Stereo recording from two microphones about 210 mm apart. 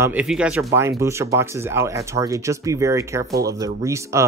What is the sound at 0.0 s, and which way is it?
Speech, 5° right (ahead or behind).